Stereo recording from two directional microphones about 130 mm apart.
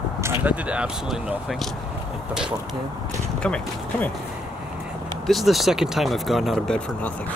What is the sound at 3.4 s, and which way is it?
Speech, 10° left (ahead or behind).